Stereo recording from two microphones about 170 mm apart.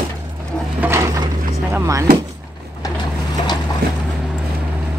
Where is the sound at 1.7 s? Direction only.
20° right (ahead or behind).